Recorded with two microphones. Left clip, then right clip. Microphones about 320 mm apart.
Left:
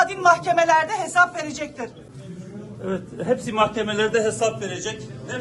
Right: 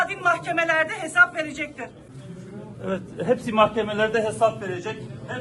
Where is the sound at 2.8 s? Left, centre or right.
Right.